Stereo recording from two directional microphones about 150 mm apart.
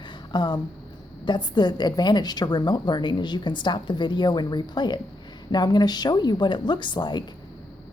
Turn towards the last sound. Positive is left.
turn(degrees=30)  # may be behind; listen again after turning